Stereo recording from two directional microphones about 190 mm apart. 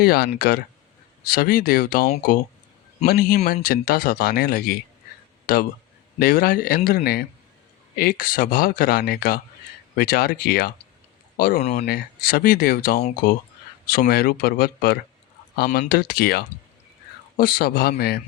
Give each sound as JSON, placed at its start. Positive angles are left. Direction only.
{"t": 0.0, "sound": "speech", "side_deg": 55}
{"t": 13.0, "sound": "speech", "side_deg": 35}
{"t": 13.8, "sound": "speech", "side_deg": 50}